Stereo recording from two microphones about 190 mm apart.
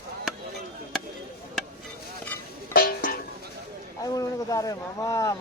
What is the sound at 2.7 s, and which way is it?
Music, 50° left (ahead or behind).